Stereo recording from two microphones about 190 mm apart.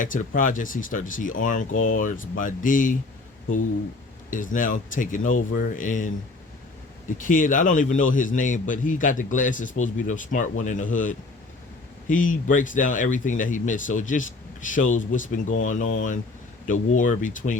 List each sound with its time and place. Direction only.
0.0 s a man's voice: 45° left (ahead or behind)
4.3 s a man's voice: 45° left (ahead or behind)
7.2 s a man's voice: 45° left (ahead or behind)